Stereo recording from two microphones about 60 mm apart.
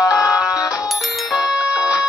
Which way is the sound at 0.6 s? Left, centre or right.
Left.